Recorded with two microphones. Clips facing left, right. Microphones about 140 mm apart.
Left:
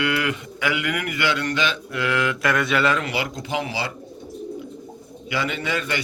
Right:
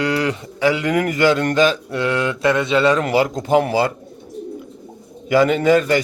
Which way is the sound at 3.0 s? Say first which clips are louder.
Right 9 dB; 40° right (ahead or behind).